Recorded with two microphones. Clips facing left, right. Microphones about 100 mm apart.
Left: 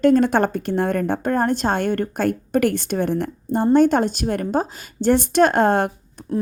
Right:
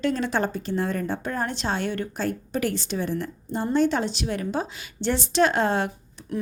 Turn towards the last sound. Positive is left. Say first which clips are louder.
# left 8 dB
turn(degrees=50)  # may be behind; listen again after turning